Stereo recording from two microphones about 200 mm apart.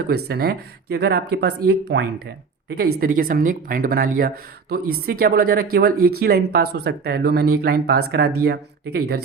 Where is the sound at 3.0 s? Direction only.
45° right (ahead or behind).